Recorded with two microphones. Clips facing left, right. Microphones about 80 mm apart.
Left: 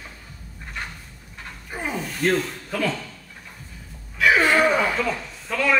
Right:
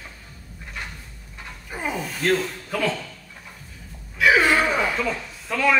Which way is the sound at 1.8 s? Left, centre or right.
Centre.